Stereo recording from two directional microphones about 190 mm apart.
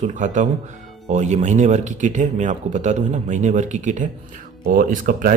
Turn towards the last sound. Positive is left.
turn(degrees=-45)  # may be behind; listen again after turning